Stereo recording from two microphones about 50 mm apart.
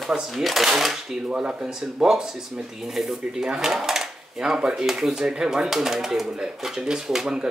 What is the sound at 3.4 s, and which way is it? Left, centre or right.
Speech, centre.